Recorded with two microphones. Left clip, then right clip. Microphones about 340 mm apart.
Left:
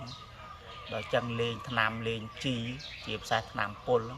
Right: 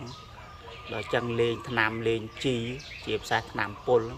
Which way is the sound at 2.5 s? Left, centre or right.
Right.